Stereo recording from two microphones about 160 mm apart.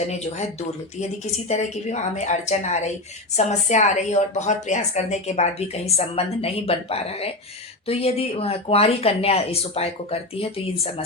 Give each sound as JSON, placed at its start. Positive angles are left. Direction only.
{"t": 0.0, "sound": "a woman's voice", "side_deg": 45}